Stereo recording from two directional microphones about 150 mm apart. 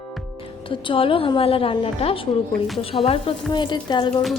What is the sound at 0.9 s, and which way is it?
Speech, 35° left (ahead or behind).